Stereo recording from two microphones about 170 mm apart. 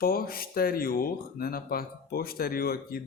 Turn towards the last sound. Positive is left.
turn(degrees=60)  # may be behind; listen again after turning